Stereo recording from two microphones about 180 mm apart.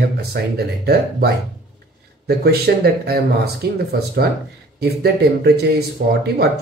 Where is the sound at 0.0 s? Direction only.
60° right (ahead or behind).